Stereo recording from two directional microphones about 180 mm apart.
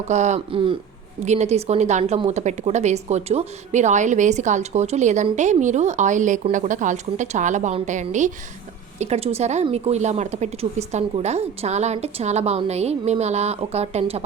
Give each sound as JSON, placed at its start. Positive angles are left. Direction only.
{"t": 0.1, "sound": "a woman's voice", "side_deg": -40}